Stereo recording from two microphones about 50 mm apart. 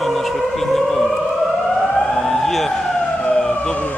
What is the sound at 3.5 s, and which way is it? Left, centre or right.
Emergency vehicle, left.